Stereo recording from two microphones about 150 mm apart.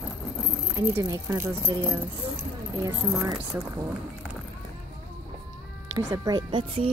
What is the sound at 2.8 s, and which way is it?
Speech, 25° right (ahead or behind).